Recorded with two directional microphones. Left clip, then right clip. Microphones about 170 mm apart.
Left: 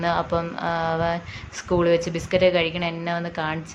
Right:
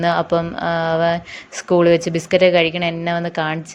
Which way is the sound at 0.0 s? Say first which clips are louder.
Right 6 dB; 35° right (ahead or behind).